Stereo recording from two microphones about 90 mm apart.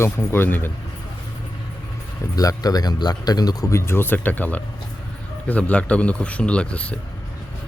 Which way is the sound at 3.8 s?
25° left (ahead or behind).